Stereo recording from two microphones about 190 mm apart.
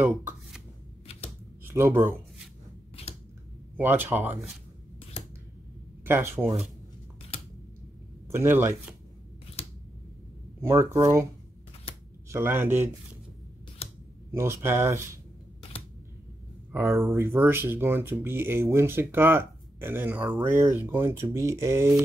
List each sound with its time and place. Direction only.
0.0 s speech: 10° right (ahead or behind)
1.6 s a sound: 10° right (ahead or behind)
3.7 s speech: 10° right (ahead or behind)
6.0 s speech: 10° right (ahead or behind)
8.3 s speech: 10° right (ahead or behind)
10.6 s speech: 15° right (ahead or behind)
12.3 s speech: 15° right (ahead or behind)
13.8 s a sound: 30° left (ahead or behind)
14.3 s speech: 15° right (ahead or behind)
16.7 s speech: 15° right (ahead or behind)